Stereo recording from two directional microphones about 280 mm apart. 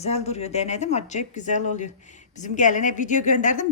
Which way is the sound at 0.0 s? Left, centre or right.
Left.